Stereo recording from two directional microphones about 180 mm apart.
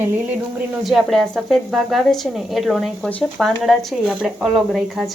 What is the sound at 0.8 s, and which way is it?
A woman's voice, centre (ahead or behind).